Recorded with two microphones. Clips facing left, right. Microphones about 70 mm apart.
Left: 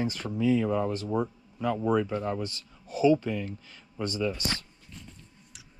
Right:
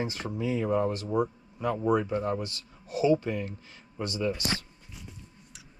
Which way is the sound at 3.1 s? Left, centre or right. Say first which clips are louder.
Even; right.